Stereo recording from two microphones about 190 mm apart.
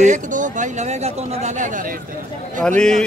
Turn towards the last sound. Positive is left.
turn(degrees=5)  # may be behind; listen again after turning